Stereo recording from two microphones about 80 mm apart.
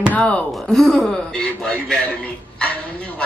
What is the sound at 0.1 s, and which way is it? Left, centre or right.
Speech, centre.